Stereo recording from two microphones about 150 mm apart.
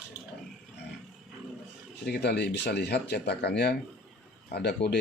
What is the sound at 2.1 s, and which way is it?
Speech, 90° left.